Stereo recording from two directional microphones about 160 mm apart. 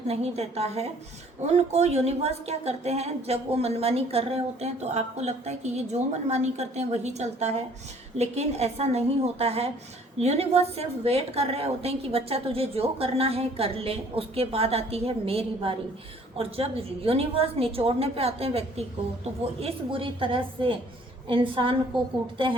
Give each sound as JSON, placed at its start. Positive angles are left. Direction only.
{"t": 0.1, "sound": "a woman's voice", "side_deg": -40}